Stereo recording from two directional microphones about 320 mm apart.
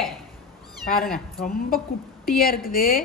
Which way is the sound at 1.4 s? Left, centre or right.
Left.